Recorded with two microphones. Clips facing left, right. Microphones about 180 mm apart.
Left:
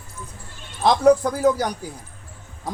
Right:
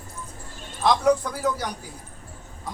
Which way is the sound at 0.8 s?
35° left (ahead or behind).